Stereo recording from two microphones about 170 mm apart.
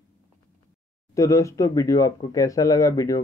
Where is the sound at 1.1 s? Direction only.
20° left (ahead or behind).